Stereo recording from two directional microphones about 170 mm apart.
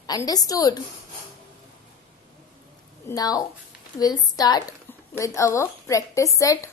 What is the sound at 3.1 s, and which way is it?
A woman's voice, 20° left (ahead or behind).